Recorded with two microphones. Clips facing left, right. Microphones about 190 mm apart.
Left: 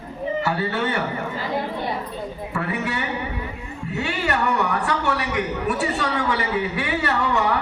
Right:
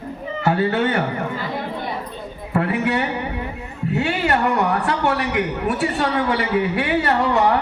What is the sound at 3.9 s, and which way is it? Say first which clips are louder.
A man's voice: right 5 dB; 55° right (ahead or behind).